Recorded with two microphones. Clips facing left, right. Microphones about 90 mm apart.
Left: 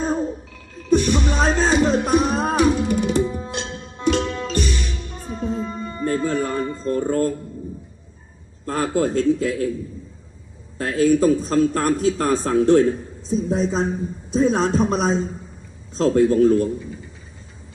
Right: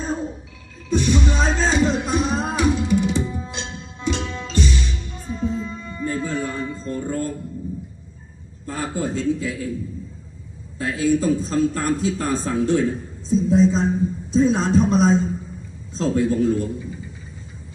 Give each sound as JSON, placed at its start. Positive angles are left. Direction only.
{"t": 0.9, "sound": "music", "side_deg": 55}
{"t": 2.9, "sound": "tabla", "side_deg": 60}
{"t": 3.2, "sound": "tabla", "side_deg": 5}
{"t": 3.5, "sound": "music", "side_deg": 60}
{"t": 4.2, "sound": "music", "side_deg": 5}
{"t": 4.4, "sound": "music", "side_deg": 60}
{"t": 8.6, "sound": "a man's voice", "side_deg": 65}
{"t": 10.8, "sound": "a man's voice", "side_deg": 55}